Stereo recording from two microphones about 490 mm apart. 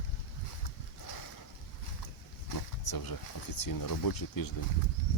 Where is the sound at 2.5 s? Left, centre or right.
Left.